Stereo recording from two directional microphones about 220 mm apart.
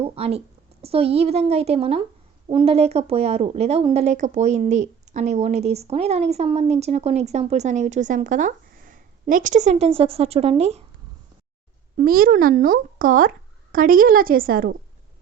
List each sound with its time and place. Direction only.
0.0 s a woman's voice: 25° right (ahead or behind)
11.9 s speech: 40° right (ahead or behind)